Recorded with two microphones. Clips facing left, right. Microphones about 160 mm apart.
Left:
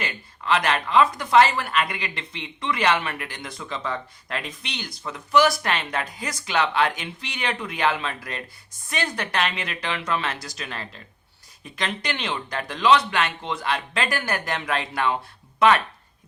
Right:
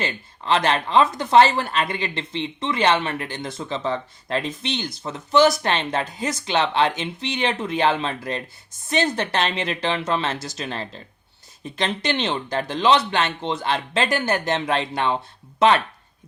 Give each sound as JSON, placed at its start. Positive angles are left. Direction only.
{"t": 0.0, "sound": "speech", "side_deg": -30}